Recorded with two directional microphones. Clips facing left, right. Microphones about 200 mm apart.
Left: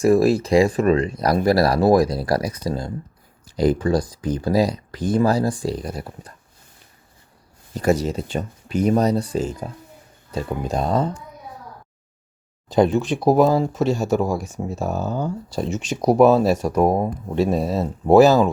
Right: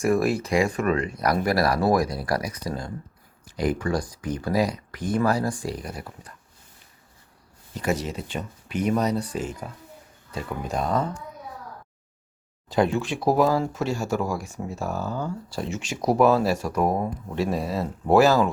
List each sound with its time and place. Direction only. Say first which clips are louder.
0.0 s speech: left 6 dB; 30° left (ahead or behind)
7.8 s speech: left 7 dB; 35° left (ahead or behind)
12.6 s speech: left 5 dB; 20° left (ahead or behind)